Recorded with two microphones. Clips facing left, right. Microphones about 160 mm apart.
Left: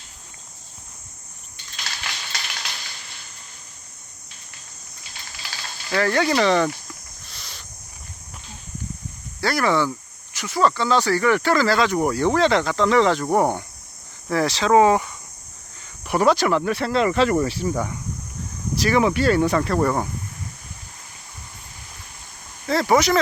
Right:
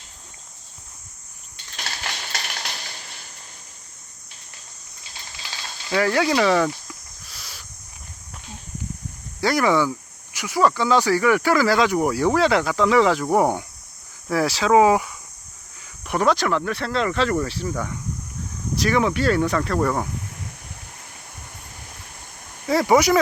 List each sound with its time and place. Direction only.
1.7 s a sound: 40° right (ahead or behind)
5.9 s speech: 10° right (ahead or behind)
6.8 s a sound: 5° right (ahead or behind)
9.4 s speech: 15° right (ahead or behind); by 17.9 s 15° left (ahead or behind)
18.8 s speech: 5° left (ahead or behind)
22.6 s speech: 10° right (ahead or behind)